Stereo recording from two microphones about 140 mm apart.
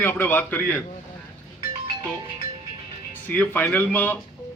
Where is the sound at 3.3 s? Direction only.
15° left (ahead or behind).